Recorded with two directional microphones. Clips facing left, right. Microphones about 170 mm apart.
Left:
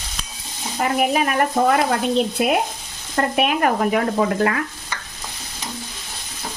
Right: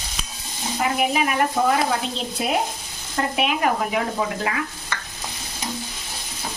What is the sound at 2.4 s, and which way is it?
Frying, 55° left (ahead or behind).